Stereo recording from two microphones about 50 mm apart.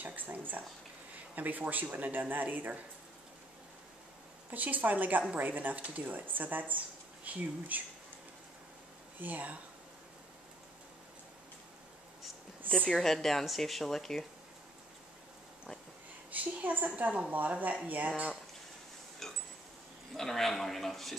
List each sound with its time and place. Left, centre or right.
0.0 s a woman's voice: right
4.5 s a woman's voice: right
9.2 s a woman's voice: right
12.6 s a woman's voice: left
12.9 s speech: centre
16.3 s a woman's voice: right
19.2 s a sound: centre
20.2 s speech: centre